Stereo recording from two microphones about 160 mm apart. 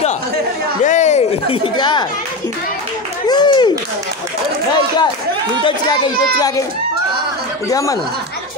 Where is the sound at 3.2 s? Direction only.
25° left (ahead or behind).